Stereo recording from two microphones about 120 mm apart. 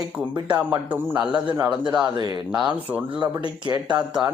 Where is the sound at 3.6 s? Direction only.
40° right (ahead or behind).